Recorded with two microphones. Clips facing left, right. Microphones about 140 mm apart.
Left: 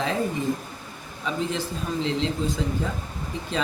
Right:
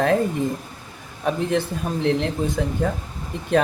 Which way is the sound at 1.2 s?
60° right (ahead or behind).